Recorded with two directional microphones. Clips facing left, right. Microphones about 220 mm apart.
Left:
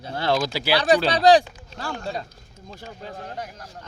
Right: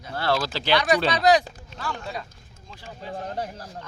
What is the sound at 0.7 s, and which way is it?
Speech, 30° left (ahead or behind).